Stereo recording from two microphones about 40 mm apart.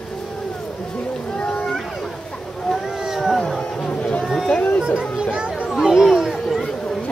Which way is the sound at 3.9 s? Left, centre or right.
Left.